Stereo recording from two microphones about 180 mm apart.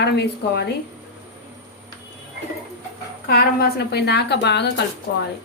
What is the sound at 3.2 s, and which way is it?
A woman's voice, 60° left (ahead or behind).